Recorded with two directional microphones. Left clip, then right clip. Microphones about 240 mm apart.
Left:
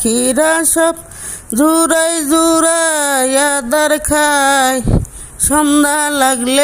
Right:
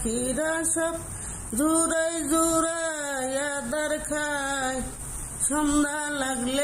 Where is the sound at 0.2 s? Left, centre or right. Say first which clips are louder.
Left 15 dB; left.